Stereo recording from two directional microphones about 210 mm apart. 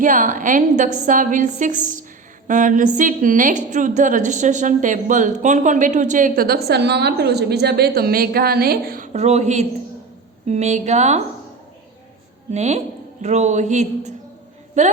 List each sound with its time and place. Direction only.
0.0 s a woman's voice: 40° right (ahead or behind)
12.5 s a woman's voice: 30° right (ahead or behind)